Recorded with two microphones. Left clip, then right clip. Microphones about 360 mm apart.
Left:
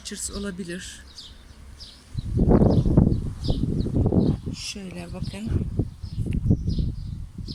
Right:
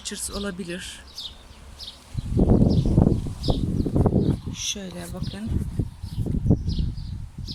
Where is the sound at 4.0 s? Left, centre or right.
Right.